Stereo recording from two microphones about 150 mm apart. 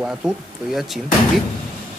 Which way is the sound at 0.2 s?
5° right (ahead or behind).